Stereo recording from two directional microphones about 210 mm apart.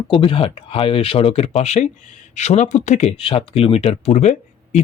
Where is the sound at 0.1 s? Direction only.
25° left (ahead or behind).